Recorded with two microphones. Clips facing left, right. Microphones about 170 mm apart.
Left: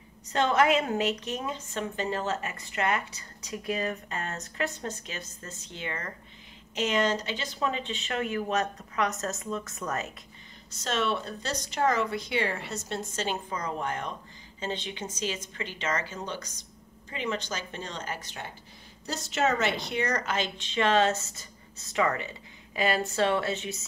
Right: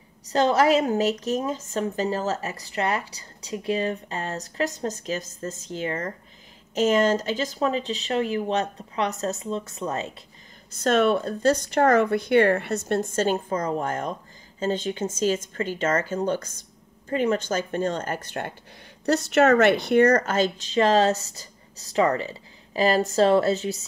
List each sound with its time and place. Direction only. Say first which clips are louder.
0.3 s a woman's voice: right 4 dB; 35° right (ahead or behind)
10.8 s a woman's voice: right 9 dB; 50° right (ahead or behind); by 23.8 s 35° right (ahead or behind)